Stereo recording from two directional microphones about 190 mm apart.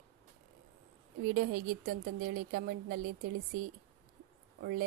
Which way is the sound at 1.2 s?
50° right (ahead or behind).